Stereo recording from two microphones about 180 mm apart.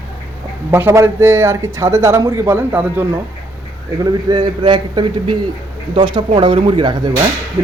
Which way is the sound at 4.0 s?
25° right (ahead or behind).